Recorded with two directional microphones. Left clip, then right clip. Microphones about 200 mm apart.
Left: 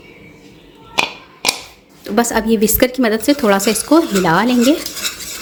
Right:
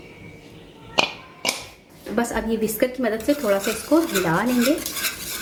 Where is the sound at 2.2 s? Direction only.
45° left (ahead or behind).